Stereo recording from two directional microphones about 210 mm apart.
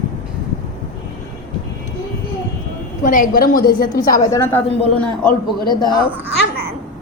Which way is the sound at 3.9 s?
15° left (ahead or behind).